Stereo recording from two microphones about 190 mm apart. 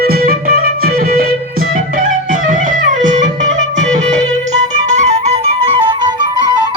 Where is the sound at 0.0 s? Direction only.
50° right (ahead or behind).